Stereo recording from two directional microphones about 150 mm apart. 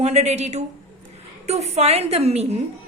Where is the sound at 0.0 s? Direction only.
45° right (ahead or behind).